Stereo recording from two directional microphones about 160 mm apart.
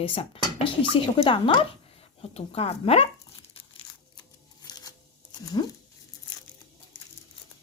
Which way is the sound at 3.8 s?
30° left (ahead or behind).